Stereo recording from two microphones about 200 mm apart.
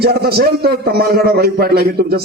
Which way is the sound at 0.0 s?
50° right (ahead or behind).